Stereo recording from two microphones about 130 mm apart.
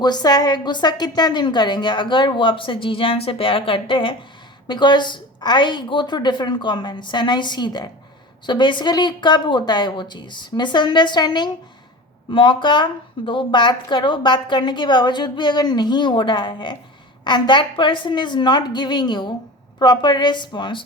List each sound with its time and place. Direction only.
0.0 s a woman's voice: 30° left (ahead or behind)